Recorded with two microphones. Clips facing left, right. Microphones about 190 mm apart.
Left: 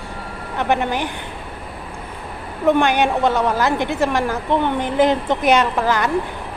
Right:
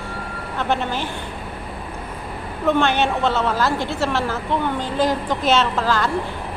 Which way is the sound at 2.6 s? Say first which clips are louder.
Left 3 dB; 15° left (ahead or behind).